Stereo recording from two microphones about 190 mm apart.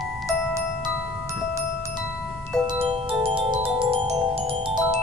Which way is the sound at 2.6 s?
25° right (ahead or behind).